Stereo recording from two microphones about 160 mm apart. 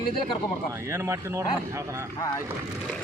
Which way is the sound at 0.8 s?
15° right (ahead or behind).